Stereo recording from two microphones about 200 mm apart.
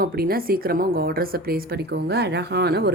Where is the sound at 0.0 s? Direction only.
45° right (ahead or behind).